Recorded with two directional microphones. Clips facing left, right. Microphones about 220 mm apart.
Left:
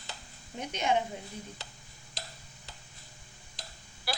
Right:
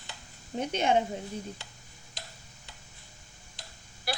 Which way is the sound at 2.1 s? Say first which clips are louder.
Left 2 dB; 40° left (ahead or behind).